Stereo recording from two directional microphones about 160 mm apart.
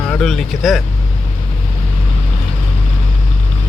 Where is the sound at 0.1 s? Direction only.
5° left (ahead or behind).